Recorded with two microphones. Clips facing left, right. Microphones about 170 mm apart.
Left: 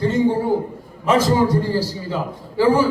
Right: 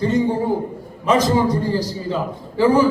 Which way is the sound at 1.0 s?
15° right (ahead or behind).